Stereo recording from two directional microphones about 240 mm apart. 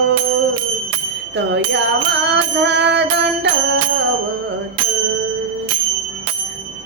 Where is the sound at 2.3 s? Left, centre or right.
Right.